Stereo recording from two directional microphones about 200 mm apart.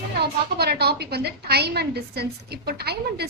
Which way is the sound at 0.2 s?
55° right (ahead or behind).